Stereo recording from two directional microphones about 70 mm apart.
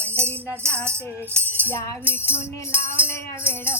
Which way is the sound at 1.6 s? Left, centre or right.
Left.